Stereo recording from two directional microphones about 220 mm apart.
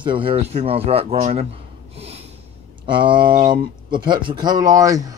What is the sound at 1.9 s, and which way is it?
Gasp, 30° right (ahead or behind).